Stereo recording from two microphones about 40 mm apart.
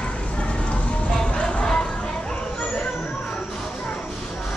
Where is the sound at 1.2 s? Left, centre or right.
Left.